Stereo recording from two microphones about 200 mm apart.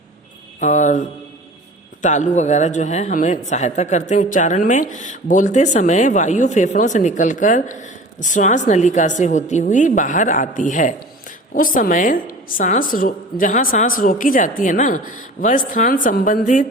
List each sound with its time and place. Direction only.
0.6 s a woman's voice: 35° left (ahead or behind)